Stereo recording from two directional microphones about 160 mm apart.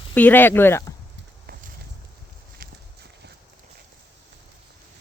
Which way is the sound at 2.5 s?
80° right.